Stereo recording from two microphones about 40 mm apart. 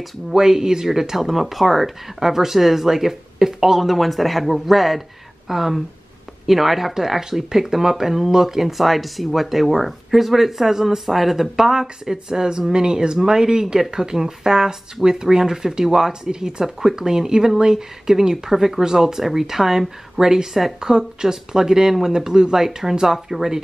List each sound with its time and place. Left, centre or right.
0.3 s speech: centre